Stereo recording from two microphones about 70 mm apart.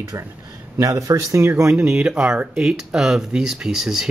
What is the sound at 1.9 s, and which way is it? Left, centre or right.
Speech, centre.